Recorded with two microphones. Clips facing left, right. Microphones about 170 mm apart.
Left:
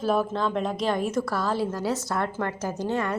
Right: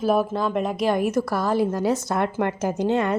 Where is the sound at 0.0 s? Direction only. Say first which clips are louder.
Right 3 dB; 10° right (ahead or behind).